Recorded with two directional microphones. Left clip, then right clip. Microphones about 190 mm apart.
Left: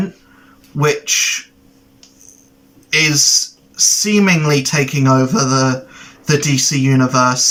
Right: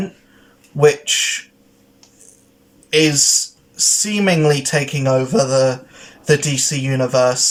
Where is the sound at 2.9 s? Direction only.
15° right (ahead or behind).